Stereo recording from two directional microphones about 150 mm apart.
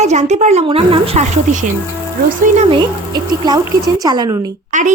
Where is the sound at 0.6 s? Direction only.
40° right (ahead or behind).